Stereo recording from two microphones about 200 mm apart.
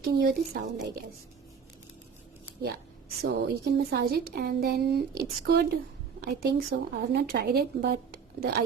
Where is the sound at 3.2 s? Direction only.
55° right (ahead or behind).